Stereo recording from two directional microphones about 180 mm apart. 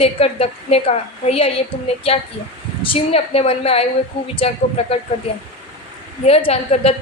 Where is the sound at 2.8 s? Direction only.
30° left (ahead or behind).